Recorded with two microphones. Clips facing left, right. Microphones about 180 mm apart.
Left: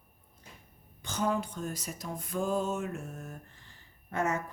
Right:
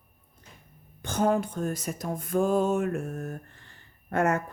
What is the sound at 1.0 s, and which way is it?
Music, 55° right (ahead or behind).